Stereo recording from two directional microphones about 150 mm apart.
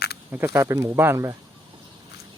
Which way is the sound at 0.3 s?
15° right (ahead or behind).